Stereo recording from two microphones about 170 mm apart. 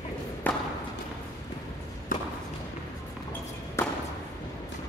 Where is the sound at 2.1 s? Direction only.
55° left (ahead or behind).